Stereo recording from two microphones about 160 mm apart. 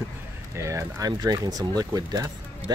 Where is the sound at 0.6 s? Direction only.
20° right (ahead or behind).